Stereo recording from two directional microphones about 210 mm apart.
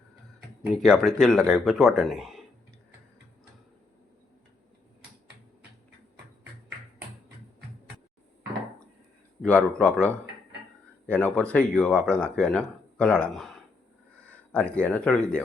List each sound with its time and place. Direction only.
0.8 s speech: centre (ahead or behind)
9.4 s speech: 5° left (ahead or behind)